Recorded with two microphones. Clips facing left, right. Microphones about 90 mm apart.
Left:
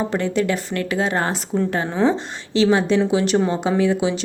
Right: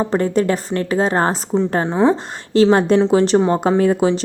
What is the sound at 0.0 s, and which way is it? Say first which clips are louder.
A woman's voice: right 4 dB; 40° right (ahead or behind).